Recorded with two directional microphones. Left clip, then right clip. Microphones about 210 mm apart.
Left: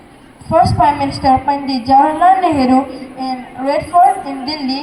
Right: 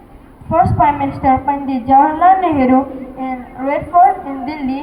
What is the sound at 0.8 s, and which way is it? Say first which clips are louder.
A woman's voice: left 1 dB; 20° left (ahead or behind).